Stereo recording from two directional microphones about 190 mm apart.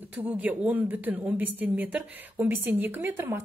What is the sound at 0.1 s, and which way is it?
A woman's voice, 10° right (ahead or behind).